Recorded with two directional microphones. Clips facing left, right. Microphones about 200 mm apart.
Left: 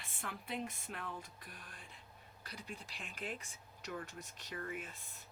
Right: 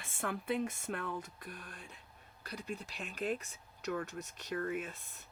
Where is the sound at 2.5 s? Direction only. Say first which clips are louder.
Right 7 dB; 40° right (ahead or behind).